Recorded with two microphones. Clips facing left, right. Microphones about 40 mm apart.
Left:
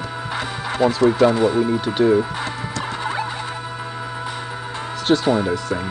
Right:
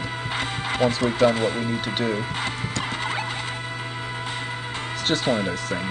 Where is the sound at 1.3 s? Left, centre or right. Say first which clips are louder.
Left 4 dB; right.